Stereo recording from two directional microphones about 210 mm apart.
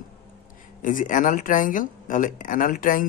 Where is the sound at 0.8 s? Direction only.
40° left (ahead or behind).